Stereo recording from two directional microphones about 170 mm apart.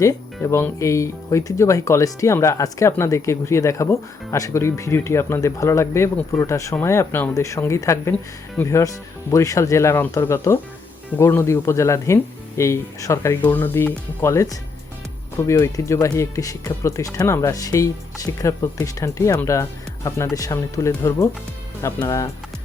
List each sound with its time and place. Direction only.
0.0 s speech: 20° left (ahead or behind)